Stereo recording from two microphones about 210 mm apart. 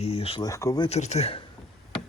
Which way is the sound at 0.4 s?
15° left (ahead or behind).